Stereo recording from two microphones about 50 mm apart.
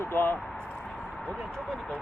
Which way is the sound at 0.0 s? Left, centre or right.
Left.